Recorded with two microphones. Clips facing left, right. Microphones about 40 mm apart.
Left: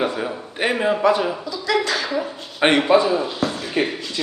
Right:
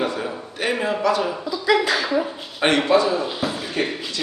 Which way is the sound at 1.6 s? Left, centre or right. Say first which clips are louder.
Right 2 dB; centre.